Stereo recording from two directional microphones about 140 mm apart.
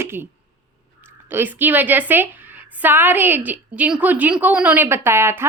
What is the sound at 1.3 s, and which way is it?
A woman's voice, 15° right (ahead or behind).